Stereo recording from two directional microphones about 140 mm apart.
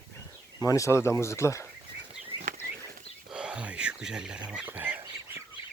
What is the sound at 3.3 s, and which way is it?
Speech, 5° right (ahead or behind).